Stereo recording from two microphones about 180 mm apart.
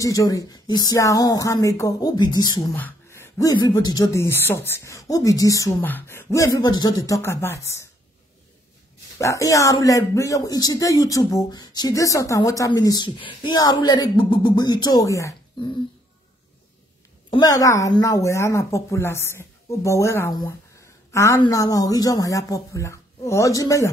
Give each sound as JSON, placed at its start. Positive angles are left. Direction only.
{"t": 0.0, "sound": "speech", "side_deg": 20}
{"t": 2.7, "sound": "speech", "side_deg": 10}
{"t": 9.2, "sound": "speech", "side_deg": 15}
{"t": 17.3, "sound": "speech", "side_deg": 20}